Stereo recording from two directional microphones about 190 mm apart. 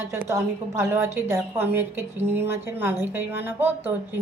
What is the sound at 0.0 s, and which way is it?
Speech, 15° right (ahead or behind).